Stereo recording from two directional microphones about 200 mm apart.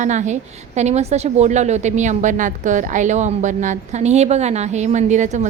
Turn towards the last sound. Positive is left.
turn(degrees=-35)  # may be behind; listen again after turning